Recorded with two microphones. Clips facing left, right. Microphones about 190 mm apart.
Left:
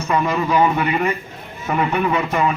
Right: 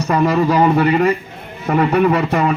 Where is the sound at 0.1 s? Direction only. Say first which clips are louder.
Right 4 dB; 40° right (ahead or behind).